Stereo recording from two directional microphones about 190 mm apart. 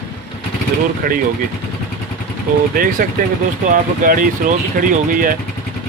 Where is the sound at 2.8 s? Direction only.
50° right (ahead or behind).